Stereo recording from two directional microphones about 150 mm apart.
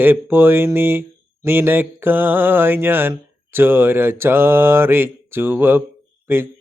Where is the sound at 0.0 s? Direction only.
15° right (ahead or behind).